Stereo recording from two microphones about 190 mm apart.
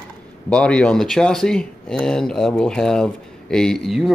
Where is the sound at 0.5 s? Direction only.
5° left (ahead or behind).